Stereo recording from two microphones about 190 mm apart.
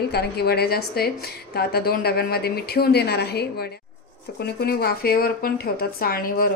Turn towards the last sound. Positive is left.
turn(degrees=50)  # may be behind; listen again after turning